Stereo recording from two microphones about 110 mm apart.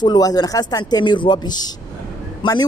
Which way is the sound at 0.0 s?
35° left (ahead or behind).